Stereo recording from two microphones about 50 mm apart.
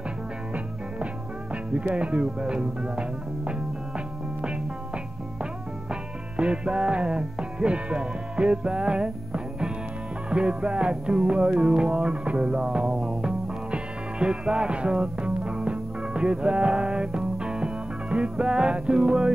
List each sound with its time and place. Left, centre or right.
1.5 s music: right